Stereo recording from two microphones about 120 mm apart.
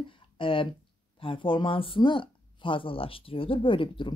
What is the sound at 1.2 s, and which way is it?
Speech, 45° left (ahead or behind).